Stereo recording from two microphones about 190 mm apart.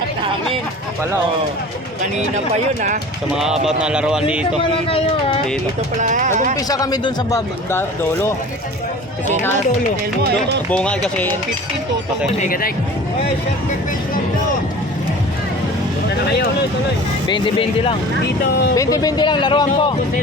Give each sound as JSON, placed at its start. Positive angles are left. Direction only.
{"t": 3.3, "sound": "speech", "side_deg": -5}
{"t": 4.9, "sound": "speech", "side_deg": 30}
{"t": 6.0, "sound": "speech", "side_deg": -40}
{"t": 6.7, "sound": "speech", "side_deg": 20}
{"t": 10.7, "sound": "speech", "side_deg": 5}
{"t": 12.4, "sound": "speech", "side_deg": 50}
{"t": 17.2, "sound": "speech", "side_deg": 25}